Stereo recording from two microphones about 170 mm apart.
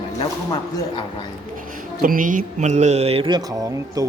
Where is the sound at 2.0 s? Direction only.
55° right (ahead or behind); by 4.1 s 20° right (ahead or behind).